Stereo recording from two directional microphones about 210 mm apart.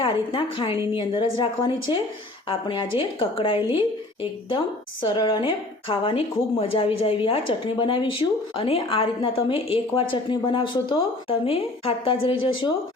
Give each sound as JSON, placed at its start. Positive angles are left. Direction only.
{"t": 0.0, "sound": "a woman's voice", "side_deg": 25}